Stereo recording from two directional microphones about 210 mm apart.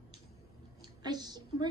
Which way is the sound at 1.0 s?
20° right (ahead or behind).